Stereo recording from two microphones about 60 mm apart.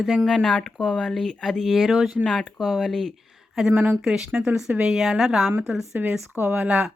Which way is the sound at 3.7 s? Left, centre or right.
Right.